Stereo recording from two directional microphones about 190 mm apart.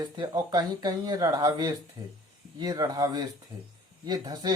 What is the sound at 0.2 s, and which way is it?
Speech, 20° right (ahead or behind).